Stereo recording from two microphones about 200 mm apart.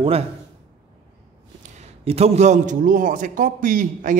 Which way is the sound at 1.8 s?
30° right (ahead or behind).